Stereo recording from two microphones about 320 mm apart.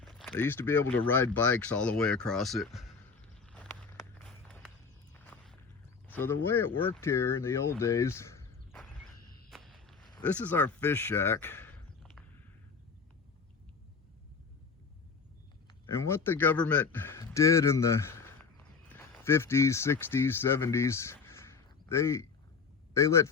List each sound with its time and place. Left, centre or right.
0.0 s a sound: centre
0.9 s speech: centre
3.4 s walk: centre
6.1 s speech: centre
9.5 s walk: centre
10.1 s speech: centre
15.9 s speech: centre